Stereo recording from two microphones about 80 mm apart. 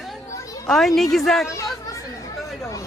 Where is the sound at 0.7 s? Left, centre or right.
Centre.